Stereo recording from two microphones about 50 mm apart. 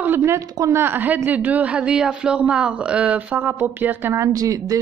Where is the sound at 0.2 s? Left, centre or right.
Right.